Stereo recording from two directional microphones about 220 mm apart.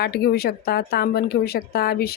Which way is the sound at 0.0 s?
45° left (ahead or behind).